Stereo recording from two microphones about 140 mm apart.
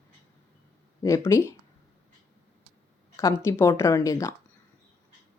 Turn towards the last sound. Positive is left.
turn(degrees=25)  # may be behind; listen again after turning